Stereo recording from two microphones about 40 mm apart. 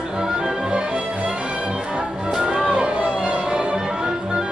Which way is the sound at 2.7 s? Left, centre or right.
Right.